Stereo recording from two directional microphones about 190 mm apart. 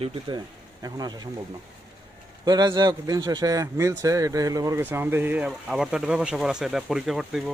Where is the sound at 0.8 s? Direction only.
20° right (ahead or behind).